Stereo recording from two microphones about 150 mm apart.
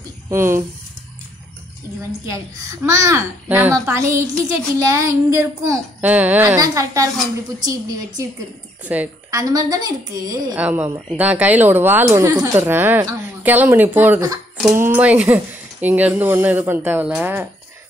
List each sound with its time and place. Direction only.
0.3 s speech: 15° right (ahead or behind)
2.2 s a child's voice: 20° right (ahead or behind)
6.6 s a child's voice: 20° right (ahead or behind)
8.8 s speech: 10° right (ahead or behind)
9.3 s a child's voice: 25° right (ahead or behind)
10.5 s speech: 10° right (ahead or behind)